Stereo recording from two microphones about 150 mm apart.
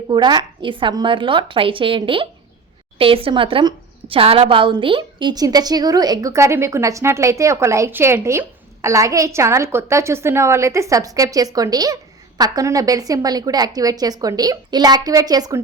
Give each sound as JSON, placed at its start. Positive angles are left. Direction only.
{"t": 0.1, "sound": "a woman's voice", "side_deg": -30}